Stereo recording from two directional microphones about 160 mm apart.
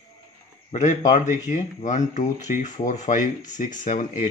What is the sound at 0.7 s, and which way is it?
Speech, 50° left (ahead or behind).